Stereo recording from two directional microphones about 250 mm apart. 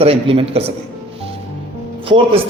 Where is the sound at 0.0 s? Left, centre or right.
Right.